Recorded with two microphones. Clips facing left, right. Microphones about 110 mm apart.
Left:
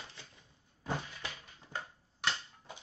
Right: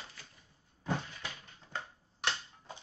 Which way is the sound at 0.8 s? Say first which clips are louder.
Right 2 dB; 10° left (ahead or behind).